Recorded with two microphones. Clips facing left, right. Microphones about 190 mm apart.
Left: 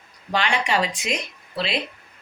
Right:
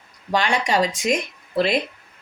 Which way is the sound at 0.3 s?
40° right (ahead or behind).